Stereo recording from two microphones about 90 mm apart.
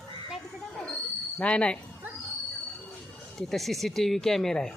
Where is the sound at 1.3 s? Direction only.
10° left (ahead or behind).